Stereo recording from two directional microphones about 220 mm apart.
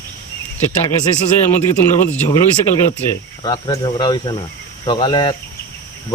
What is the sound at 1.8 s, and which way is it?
A man's voice, 10° left (ahead or behind).